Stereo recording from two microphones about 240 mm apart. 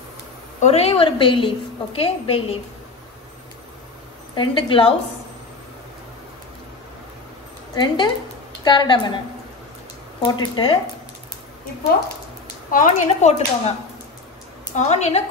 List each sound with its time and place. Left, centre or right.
0.6 s a woman's voice: left
4.4 s a woman's voice: left
7.7 s a woman's voice: centre
10.2 s speech: centre
12.7 s speech: left
14.8 s a woman's voice: left